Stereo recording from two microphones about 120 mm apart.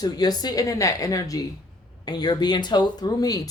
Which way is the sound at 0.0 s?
35° left (ahead or behind).